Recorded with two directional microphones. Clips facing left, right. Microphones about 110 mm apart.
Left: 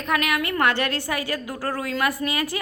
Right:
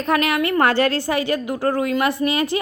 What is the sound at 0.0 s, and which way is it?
A woman's voice, 30° right (ahead or behind).